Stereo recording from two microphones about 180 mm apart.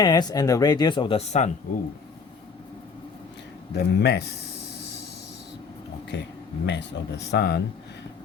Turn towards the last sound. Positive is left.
turn(degrees=65)  # may be behind; listen again after turning